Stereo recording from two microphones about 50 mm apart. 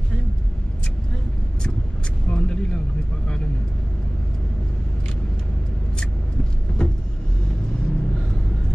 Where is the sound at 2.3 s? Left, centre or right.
Left.